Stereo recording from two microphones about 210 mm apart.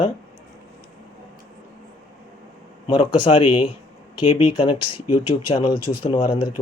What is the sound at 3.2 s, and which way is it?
Speech, 25° left (ahead or behind).